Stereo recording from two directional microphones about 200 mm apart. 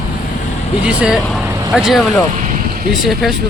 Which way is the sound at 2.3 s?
35° right (ahead or behind).